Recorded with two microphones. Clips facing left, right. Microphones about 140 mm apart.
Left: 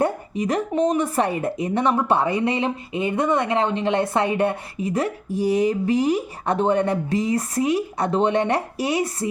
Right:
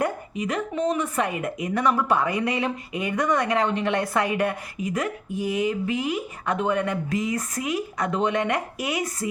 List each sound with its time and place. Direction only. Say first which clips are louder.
0.0 s a woman's voice: left 4 dB; 40° left (ahead or behind)